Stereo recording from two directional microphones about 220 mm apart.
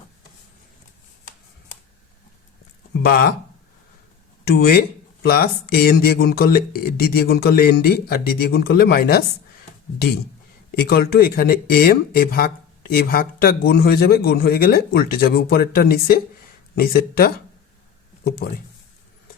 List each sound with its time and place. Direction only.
2.9 s speech: 45° left (ahead or behind)
4.4 s speech: 45° left (ahead or behind)
10.7 s speech: 45° left (ahead or behind)